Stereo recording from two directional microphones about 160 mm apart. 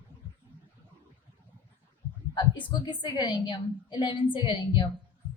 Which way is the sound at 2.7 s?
25° left (ahead or behind).